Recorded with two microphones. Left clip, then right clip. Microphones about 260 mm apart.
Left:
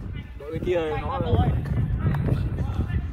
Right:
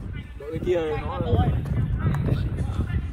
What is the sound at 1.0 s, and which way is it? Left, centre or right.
Speech, centre.